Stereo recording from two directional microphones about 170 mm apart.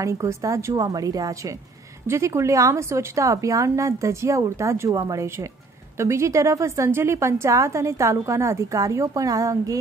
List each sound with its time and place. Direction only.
0.0 s a woman's voice: 20° right (ahead or behind)